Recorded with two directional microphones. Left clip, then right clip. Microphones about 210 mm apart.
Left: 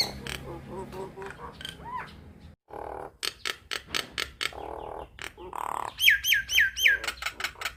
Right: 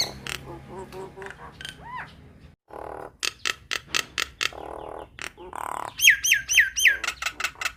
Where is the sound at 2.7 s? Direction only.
20° right (ahead or behind).